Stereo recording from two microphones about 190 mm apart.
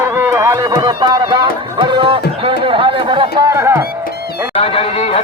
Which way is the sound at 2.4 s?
25° right (ahead or behind).